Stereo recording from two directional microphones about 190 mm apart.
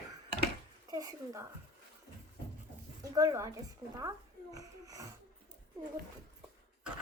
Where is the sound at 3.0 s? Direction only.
20° right (ahead or behind).